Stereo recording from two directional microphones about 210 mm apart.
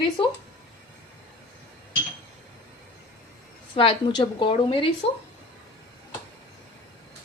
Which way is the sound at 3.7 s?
25° left (ahead or behind).